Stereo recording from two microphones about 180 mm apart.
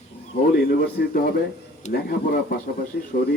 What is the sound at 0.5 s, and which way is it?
A man's voice, 60° left (ahead or behind).